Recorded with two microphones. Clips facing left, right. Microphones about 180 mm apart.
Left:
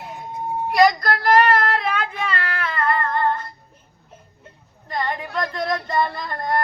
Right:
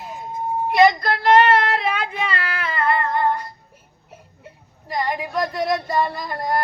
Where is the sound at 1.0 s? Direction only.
25° right (ahead or behind).